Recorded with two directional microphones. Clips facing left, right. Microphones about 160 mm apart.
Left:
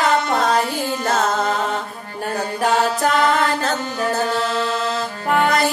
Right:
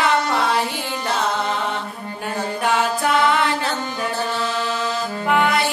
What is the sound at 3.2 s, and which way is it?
Music, 45° left (ahead or behind).